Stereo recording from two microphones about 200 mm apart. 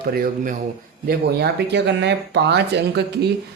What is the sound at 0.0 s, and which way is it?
Speech, 45° right (ahead or behind).